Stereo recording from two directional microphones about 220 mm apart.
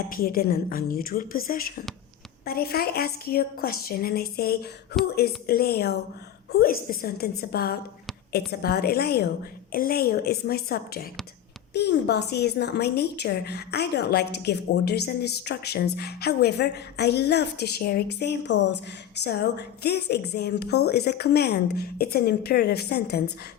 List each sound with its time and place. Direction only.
0.1 s a woman's voice: 40° left (ahead or behind)